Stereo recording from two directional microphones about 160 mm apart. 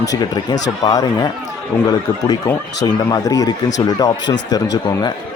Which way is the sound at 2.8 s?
25° left (ahead or behind).